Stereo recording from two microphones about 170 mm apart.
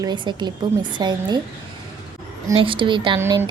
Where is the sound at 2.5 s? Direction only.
30° right (ahead or behind).